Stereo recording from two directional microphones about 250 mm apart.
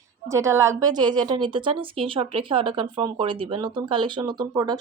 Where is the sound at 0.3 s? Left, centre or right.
Centre.